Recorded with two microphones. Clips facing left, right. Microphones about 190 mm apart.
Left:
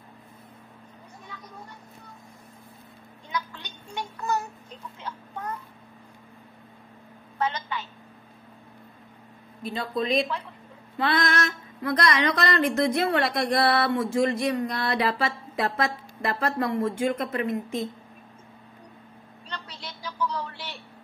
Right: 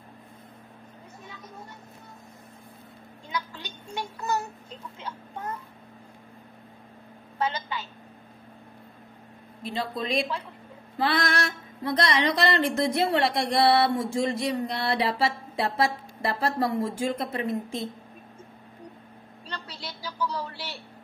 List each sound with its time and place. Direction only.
1.3 s a sound: 25° right (ahead or behind)
7.3 s a woman's voice: 30° right (ahead or behind)
9.6 s music: 25° right (ahead or behind)
19.5 s music: 35° right (ahead or behind)